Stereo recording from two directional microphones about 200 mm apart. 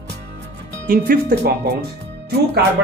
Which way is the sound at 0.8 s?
45° right (ahead or behind).